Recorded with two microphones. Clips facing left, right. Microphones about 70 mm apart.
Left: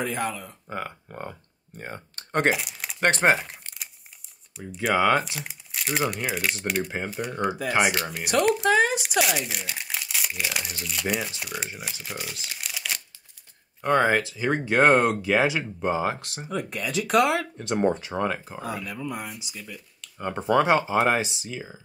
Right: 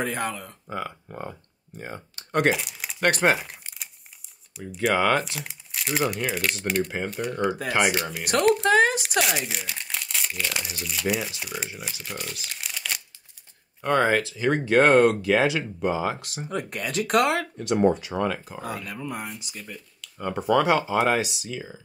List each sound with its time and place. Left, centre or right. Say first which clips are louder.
0.0 s speech: even; right
0.7 s speech: right 1 dB; left
2.5 s speech: even; centre
3.0 s speech: left 1 dB; left
3.3 s crumpling: left 1 dB; centre
4.6 s speech: right 2 dB; centre
4.9 s speech: left 2 dB; centre
8.6 s a sound: right 1 dB; right
9.2 s speech: left 1 dB; centre
13.9 s speech: even; left
16.4 s speech: even; right
17.6 s speech: right 3 dB; left
18.6 s speech: left 1 dB; right
20.2 s speech: even; left